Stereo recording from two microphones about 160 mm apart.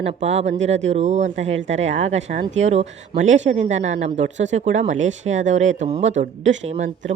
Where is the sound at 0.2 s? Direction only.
45° right (ahead or behind).